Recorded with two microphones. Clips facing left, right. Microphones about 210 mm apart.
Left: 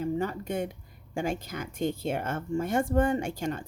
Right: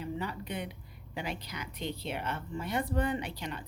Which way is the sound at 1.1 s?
45° left (ahead or behind).